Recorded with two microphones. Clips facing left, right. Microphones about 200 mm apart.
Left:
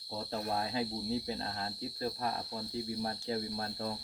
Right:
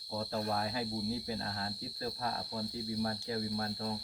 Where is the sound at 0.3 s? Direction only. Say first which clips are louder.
Left 1 dB; 25° left (ahead or behind).